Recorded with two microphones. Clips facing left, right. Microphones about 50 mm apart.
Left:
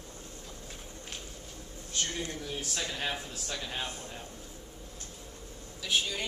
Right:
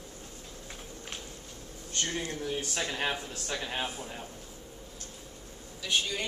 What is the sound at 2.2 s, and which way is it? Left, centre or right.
A man's voice, right.